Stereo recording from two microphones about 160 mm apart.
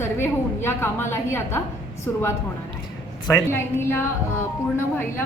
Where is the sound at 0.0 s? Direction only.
15° left (ahead or behind).